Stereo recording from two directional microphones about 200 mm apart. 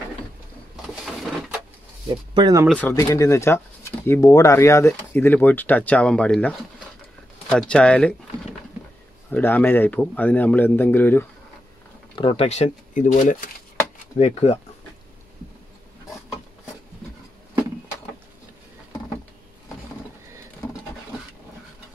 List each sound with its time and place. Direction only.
2.0 s speech: 20° right (ahead or behind)
2.7 s speech: 10° left (ahead or behind)
9.3 s speech: 10° left (ahead or behind)
12.2 s speech: 30° left (ahead or behind)
20.6 s patter: 20° left (ahead or behind)